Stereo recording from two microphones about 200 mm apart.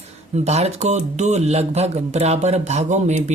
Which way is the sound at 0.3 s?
35° right (ahead or behind).